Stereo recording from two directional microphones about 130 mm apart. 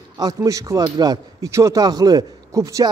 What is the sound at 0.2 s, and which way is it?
Speech, 25° right (ahead or behind).